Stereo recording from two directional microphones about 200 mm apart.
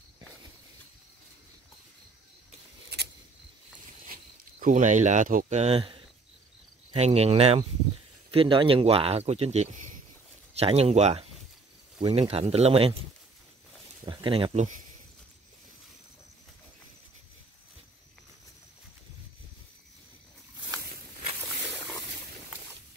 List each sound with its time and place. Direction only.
4.1 s speech: 40° right (ahead or behind)
14.0 s speech: 25° right (ahead or behind)